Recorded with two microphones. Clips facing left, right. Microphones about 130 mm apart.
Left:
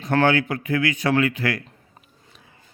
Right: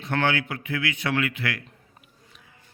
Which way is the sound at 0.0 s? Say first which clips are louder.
Left 6 dB; 40° left (ahead or behind).